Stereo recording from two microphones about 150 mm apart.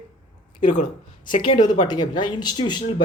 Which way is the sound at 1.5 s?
30° left (ahead or behind).